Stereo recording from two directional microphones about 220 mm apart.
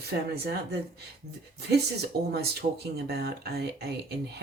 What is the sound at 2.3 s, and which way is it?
Speech, 45° right (ahead or behind).